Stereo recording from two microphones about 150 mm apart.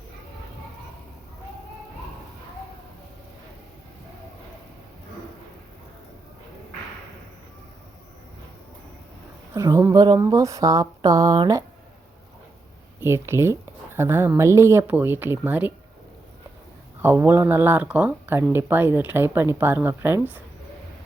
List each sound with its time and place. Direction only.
9.6 s speech: 20° right (ahead or behind)
13.0 s speech: 15° right (ahead or behind)
17.0 s speech: 15° right (ahead or behind)